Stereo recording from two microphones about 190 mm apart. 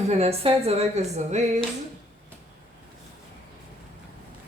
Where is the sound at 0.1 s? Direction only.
30° right (ahead or behind).